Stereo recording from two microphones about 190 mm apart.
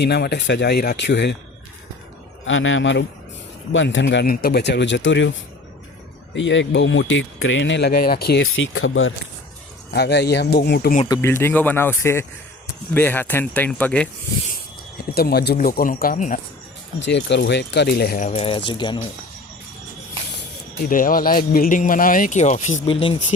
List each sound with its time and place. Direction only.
0.0 s speech: 60° left (ahead or behind)
2.5 s a man's voice: 90° left; by 5.3 s 75° left (ahead or behind)
6.3 s speech: 75° left (ahead or behind)
9.9 s speech: 60° left (ahead or behind)
11.0 s speech: 15° left (ahead or behind)
15.1 s speech: 55° left (ahead or behind)
17.0 s speech: 65° left (ahead or behind)
18.3 s speech: 30° left (ahead or behind)
20.8 s speech: 45° left (ahead or behind)
22.9 s speech: 30° left (ahead or behind)